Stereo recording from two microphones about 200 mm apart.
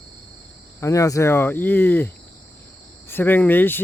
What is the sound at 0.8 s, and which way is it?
Speech, 15° left (ahead or behind).